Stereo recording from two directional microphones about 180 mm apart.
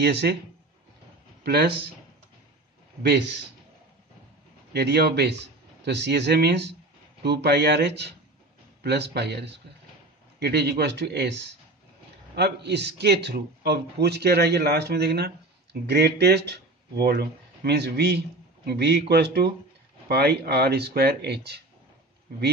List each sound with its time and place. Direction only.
0.0 s speech: 65° right (ahead or behind)
1.4 s speech: 65° right (ahead or behind)
3.0 s speech: 65° right (ahead or behind)
4.7 s speech: 65° right (ahead or behind)
12.4 s speech: 65° right (ahead or behind)